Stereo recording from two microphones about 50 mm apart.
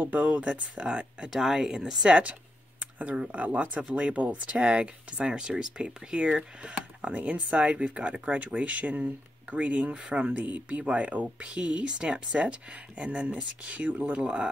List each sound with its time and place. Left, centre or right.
0.0 s speech: right
0.5 s speech: centre
1.3 s speech: centre
3.2 s speech: right
9.9 s speech: centre
10.2 s speech: right
14.2 s speech: centre